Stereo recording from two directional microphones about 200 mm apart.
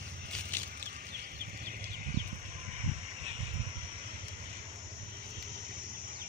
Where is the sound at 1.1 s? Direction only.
50° right (ahead or behind).